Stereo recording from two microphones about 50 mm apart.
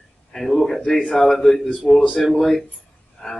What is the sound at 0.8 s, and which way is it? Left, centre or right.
Speech, centre.